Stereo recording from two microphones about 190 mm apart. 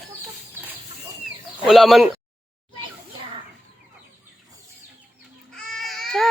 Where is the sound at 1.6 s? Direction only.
Centre (ahead or behind).